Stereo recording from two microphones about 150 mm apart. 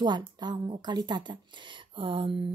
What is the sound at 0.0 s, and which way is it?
Speech, 30° right (ahead or behind).